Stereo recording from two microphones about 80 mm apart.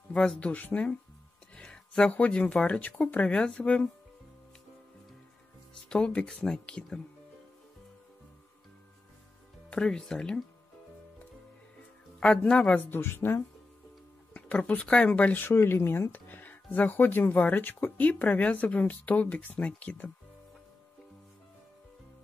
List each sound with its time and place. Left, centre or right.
0.1 s speech: centre
5.9 s speech: centre
9.7 s speech: centre
12.2 s speech: centre
12.7 s speech: left
14.3 s speech: centre